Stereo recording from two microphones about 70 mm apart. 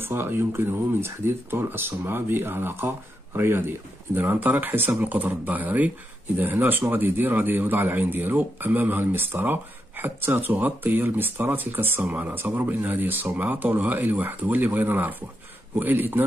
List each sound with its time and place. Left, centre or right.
0.0 s speech: right